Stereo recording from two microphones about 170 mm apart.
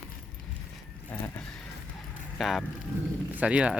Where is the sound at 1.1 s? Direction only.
10° left (ahead or behind).